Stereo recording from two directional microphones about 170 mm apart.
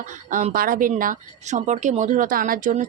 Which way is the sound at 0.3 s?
50° right (ahead or behind).